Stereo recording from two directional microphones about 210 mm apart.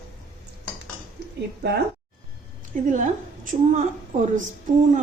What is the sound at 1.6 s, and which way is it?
Speech, 50° right (ahead or behind).